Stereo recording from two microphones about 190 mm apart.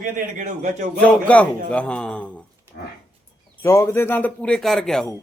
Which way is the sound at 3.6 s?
15° left (ahead or behind).